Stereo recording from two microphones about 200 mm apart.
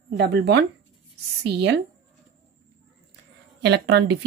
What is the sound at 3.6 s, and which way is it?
Speech, 55° right (ahead or behind).